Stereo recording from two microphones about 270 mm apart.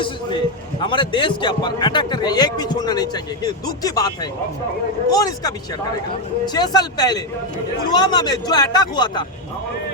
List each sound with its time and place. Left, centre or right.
0.8 s a man's voice: centre